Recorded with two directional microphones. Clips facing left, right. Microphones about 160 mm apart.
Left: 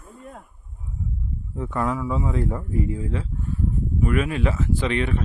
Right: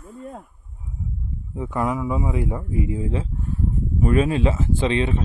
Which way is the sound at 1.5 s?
10° right (ahead or behind).